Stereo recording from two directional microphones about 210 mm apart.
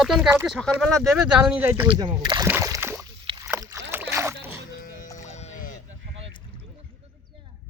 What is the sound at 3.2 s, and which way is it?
Rowboat, 20° right (ahead or behind).